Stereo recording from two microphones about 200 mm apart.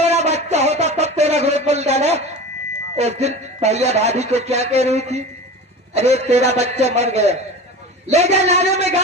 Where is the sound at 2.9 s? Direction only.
30° right (ahead or behind).